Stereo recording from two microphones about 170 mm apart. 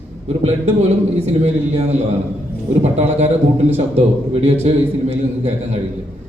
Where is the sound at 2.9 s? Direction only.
40° right (ahead or behind).